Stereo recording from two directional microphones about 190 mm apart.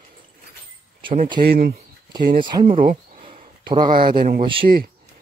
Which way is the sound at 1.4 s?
55° right (ahead or behind).